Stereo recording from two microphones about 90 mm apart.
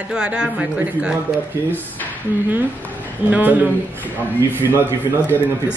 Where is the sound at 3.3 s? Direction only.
20° right (ahead or behind).